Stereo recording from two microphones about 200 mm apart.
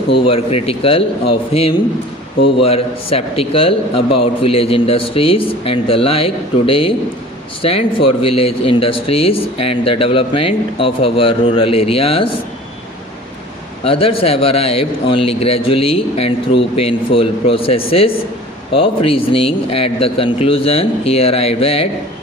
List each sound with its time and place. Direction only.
0.3 s speech: 30° left (ahead or behind)
13.8 s speech: 30° left (ahead or behind)